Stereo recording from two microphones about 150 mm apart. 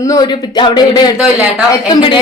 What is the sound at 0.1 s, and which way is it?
Speech, 30° left (ahead or behind).